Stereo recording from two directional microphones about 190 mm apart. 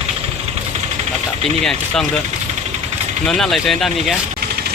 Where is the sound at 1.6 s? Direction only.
Centre (ahead or behind).